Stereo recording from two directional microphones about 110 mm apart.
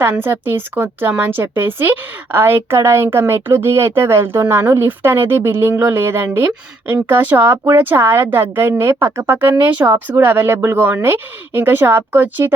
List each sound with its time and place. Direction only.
0.0 s a woman's voice: 20° right (ahead or behind)